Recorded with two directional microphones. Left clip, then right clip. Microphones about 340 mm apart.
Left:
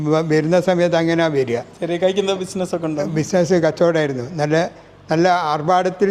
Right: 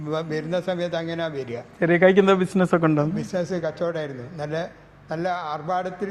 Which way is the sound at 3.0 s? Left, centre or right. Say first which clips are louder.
Left 7 dB; left.